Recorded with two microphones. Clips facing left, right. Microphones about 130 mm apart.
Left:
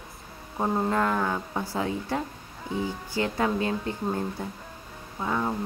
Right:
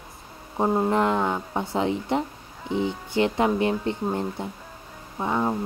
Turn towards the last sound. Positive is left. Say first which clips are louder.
# right 3 dB
turn(degrees=-20)  # may be behind; listen again after turning